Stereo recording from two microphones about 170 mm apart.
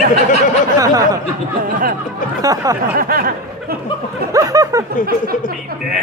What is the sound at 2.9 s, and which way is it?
Speech, 60° right (ahead or behind).